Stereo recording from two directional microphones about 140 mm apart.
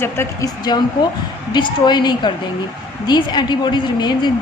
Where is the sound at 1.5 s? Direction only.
30° left (ahead or behind).